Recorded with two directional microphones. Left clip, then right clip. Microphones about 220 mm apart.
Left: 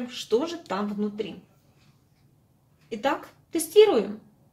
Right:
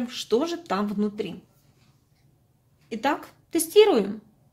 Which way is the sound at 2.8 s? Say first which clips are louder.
Right 1 dB; 50° right (ahead or behind).